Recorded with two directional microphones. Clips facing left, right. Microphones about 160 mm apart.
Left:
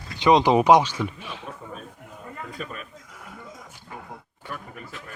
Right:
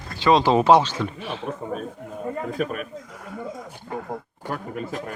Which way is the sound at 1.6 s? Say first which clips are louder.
Right 9 dB; 45° right (ahead or behind).